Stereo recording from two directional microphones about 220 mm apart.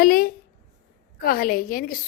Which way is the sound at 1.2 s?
40° left (ahead or behind).